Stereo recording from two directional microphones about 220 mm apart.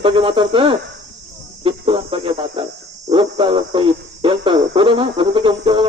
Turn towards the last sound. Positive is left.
turn(degrees=-20)  # may be behind; listen again after turning